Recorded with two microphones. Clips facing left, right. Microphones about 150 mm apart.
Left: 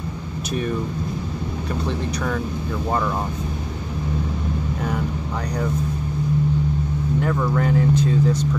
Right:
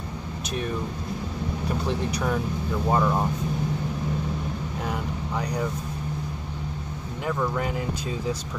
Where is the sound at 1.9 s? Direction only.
10° right (ahead or behind).